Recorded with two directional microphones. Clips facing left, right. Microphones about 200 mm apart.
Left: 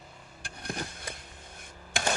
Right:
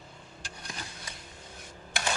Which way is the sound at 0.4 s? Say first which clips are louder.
Left 7 dB; 55° left (ahead or behind).